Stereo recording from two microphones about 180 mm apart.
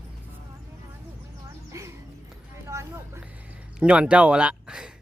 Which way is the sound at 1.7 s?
15° right (ahead or behind).